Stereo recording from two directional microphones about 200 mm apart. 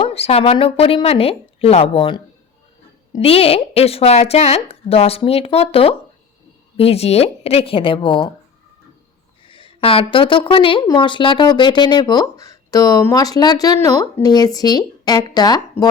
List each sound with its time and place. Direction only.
0.0 s a woman's voice: 30° left (ahead or behind)
9.5 s a woman's voice: 25° left (ahead or behind)